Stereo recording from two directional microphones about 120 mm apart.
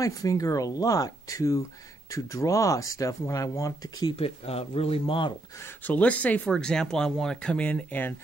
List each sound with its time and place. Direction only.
0.0 s speech: 30° left (ahead or behind)
4.2 s speech: 55° left (ahead or behind)
5.9 s speech: 10° left (ahead or behind)